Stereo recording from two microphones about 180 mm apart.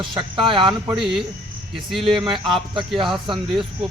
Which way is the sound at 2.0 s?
25° right (ahead or behind).